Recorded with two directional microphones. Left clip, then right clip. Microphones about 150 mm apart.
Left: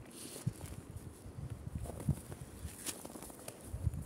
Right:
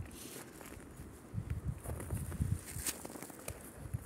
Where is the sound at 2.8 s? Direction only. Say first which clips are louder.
Right 1 dB; 30° right (ahead or behind).